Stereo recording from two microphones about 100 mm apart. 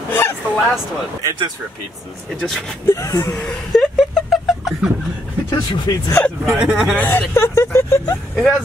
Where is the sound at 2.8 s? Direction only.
35° left (ahead or behind).